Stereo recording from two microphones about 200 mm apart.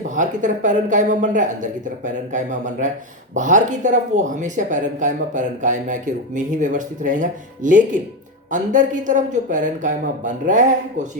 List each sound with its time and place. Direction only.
0.2 s speech: 40° right (ahead or behind)